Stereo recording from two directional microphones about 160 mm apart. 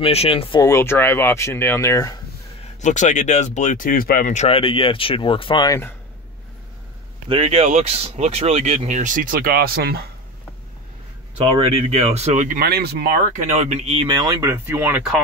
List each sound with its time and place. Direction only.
0.0 s speech: 40° left (ahead or behind)
0.6 s speech: 15° left (ahead or behind)
2.8 s speech: 50° left (ahead or behind); by 5.7 s 35° left (ahead or behind)
5.7 s speech: 15° left (ahead or behind)
7.2 s speech: 35° right (ahead or behind); by 10.0 s 75° right (ahead or behind)
11.7 s speech: 40° right (ahead or behind)
12.4 s speech: 75° right (ahead or behind)
13.6 s speech: 45° right (ahead or behind); by 15.0 s 10° right (ahead or behind)